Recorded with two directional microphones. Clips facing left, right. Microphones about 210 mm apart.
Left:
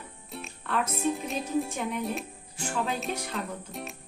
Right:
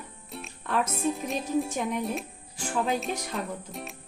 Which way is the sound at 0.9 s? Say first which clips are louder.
Right 1 dB; centre (ahead or behind).